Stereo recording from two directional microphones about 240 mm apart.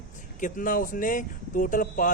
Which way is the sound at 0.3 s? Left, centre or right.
Left.